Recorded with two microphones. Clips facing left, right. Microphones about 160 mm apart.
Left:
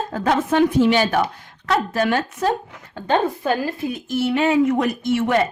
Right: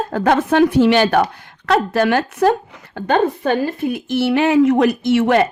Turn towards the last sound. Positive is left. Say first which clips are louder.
# right 5 dB
turn(degrees=-80)